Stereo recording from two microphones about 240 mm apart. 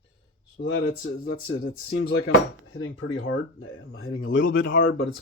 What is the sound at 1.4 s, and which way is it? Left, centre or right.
Speech, left.